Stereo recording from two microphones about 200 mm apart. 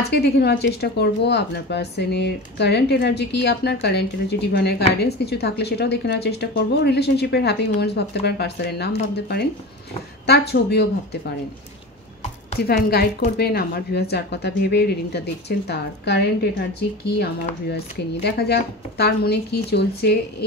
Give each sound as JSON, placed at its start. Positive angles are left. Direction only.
{"t": 0.1, "sound": "speech", "side_deg": 55}
{"t": 12.5, "sound": "speech", "side_deg": 50}